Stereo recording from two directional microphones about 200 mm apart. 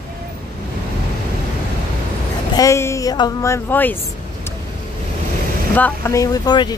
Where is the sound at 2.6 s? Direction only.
15° left (ahead or behind).